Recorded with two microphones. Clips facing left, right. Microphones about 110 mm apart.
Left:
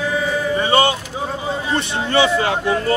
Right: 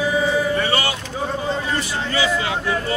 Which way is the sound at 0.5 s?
20° left (ahead or behind).